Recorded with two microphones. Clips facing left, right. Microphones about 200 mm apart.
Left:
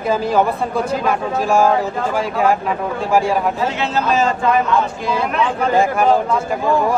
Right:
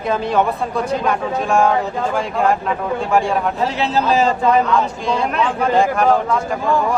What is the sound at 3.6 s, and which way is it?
Speech, 35° right (ahead or behind).